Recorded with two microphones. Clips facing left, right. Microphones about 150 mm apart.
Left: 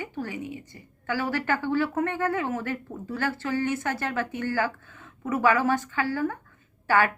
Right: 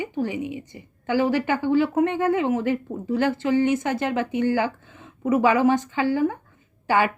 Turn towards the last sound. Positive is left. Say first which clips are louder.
# right 2 dB
turn(degrees=-15)  # may be behind; listen again after turning